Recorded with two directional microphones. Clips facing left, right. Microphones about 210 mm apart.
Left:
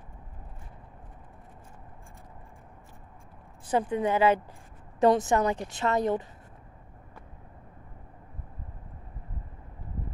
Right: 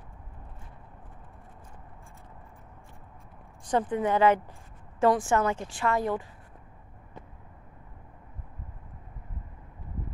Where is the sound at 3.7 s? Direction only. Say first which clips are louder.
Even; 10° left (ahead or behind).